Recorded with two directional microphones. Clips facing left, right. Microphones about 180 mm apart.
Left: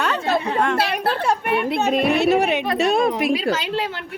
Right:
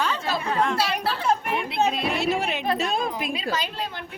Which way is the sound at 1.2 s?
80° left.